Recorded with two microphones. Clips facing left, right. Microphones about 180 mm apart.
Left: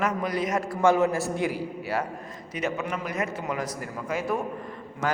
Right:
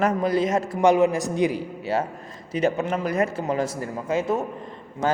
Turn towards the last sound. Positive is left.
turn(degrees=-25)  # may be behind; listen again after turning